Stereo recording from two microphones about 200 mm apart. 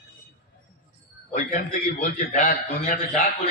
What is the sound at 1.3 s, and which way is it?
A man's voice, 40° left (ahead or behind).